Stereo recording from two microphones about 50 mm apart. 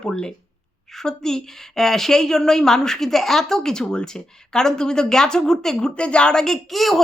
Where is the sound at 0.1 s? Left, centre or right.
Centre.